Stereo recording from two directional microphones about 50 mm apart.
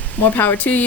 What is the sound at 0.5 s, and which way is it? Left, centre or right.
Speech, left.